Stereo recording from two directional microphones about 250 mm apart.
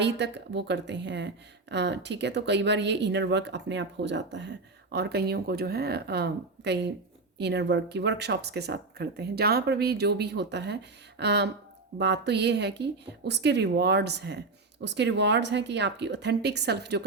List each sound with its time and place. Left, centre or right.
0.0 s speech: right